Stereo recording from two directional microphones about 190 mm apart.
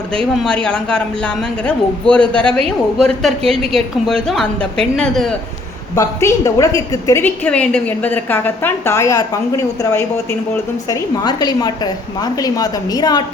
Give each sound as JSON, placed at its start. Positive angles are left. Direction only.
{"t": 0.4, "sound": "speech", "side_deg": 5}
{"t": 5.9, "sound": "a woman's voice", "side_deg": 15}